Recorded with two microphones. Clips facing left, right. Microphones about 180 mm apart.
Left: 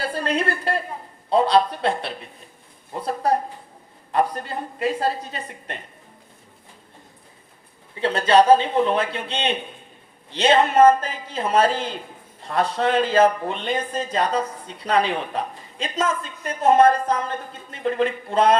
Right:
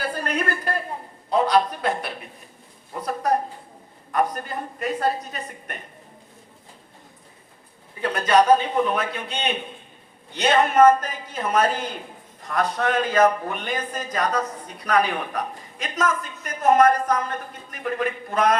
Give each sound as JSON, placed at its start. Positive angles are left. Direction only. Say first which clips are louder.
{"t": 0.0, "sound": "a woman's voice", "louder": "left 2 dB", "side_deg": 30}
{"t": 8.0, "sound": "a man's voice", "louder": "left 2 dB", "side_deg": 30}